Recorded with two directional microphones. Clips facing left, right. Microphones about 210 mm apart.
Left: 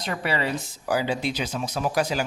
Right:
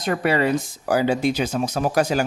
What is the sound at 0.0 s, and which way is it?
Speech, 50° right (ahead or behind).